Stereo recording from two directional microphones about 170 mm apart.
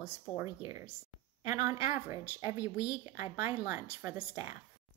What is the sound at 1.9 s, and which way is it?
Speech, 15° right (ahead or behind).